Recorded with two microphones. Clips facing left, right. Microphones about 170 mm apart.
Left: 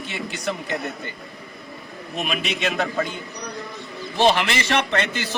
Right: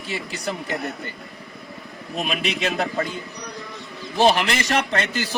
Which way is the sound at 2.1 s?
35° right (ahead or behind).